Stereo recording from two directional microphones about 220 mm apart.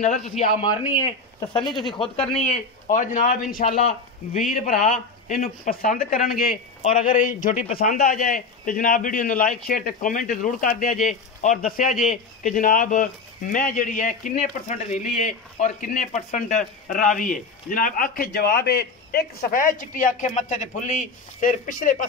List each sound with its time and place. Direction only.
0.4 s speech: 25° left (ahead or behind)
2.4 s speech: 35° left (ahead or behind)
11.9 s a man's voice: 5° right (ahead or behind)
12.4 s speech: 35° left (ahead or behind)